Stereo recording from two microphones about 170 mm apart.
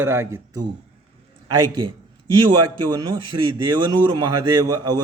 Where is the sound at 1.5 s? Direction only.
30° right (ahead or behind).